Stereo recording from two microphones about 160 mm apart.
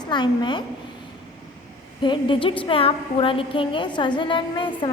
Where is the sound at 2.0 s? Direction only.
30° left (ahead or behind).